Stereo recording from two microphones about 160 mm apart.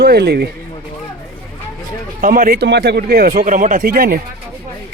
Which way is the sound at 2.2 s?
60° right (ahead or behind).